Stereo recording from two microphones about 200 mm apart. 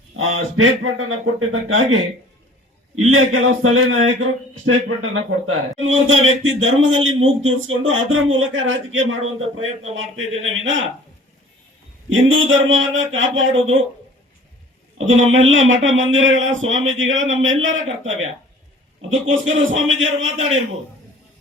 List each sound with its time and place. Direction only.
0.2 s a man's voice: 90° right
12.0 s a man's voice: 75° right (ahead or behind)
14.9 s a man's voice: 75° right (ahead or behind)
19.2 s a man's voice: 75° right (ahead or behind)